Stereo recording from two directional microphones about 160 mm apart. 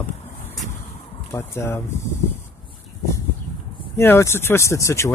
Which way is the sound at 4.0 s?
15° left (ahead or behind).